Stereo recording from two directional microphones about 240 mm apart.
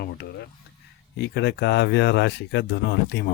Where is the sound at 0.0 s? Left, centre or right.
Left.